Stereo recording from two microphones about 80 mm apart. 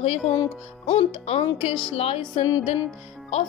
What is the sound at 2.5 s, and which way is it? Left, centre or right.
Music, left.